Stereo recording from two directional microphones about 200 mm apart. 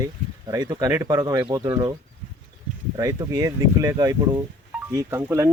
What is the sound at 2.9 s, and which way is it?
Speech, 15° right (ahead or behind).